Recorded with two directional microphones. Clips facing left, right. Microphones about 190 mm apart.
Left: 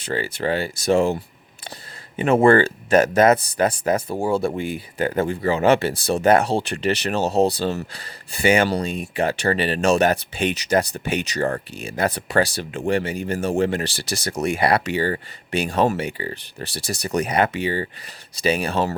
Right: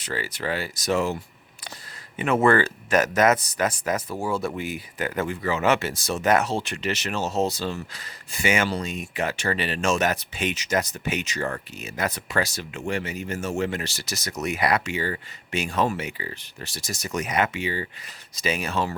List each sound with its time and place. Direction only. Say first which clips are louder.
0.0 s speech: left 6 dB; 30° left (ahead or behind)